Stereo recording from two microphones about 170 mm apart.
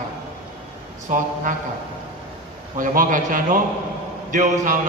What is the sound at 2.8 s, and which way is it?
A man's voice, 50° right (ahead or behind).